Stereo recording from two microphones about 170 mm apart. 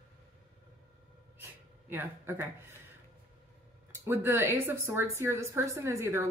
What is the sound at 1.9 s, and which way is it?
Speech, 10° right (ahead or behind).